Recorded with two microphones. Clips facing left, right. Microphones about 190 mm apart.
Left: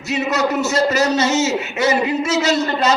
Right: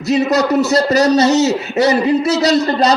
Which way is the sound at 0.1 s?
35° right (ahead or behind).